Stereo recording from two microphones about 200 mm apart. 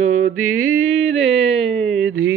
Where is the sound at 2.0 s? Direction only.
90° right.